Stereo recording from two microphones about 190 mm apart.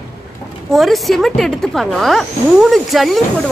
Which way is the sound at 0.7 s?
Centre (ahead or behind).